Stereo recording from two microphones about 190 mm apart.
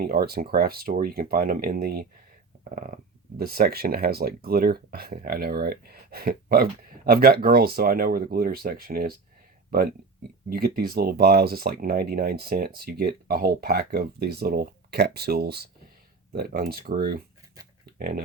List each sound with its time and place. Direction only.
0.0 s speech: 55° right (ahead or behind)
17.9 s typing: 50° right (ahead or behind)